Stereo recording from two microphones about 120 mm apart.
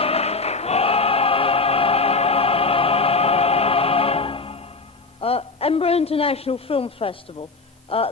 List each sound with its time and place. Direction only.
0.0 s music: 55° left (ahead or behind)
5.2 s a woman's voice: 55° left (ahead or behind)